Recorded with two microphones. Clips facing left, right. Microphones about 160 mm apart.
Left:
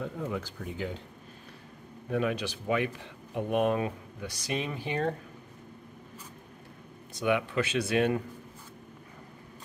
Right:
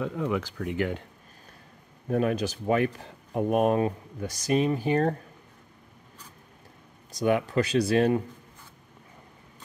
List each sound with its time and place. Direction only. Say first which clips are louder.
0.0 s speech: right 6 dB; 90° right; by 1.0 s 65° right (ahead or behind)
2.0 s speech: right 4 dB; 40° right (ahead or behind)
7.1 s speech: right 3 dB; 40° right (ahead or behind)